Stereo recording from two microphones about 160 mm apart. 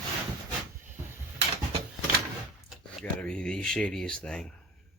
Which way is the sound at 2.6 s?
Centre (ahead or behind).